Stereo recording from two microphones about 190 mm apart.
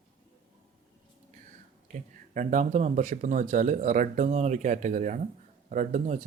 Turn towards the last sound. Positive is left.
turn(degrees=-40)  # may be behind; listen again after turning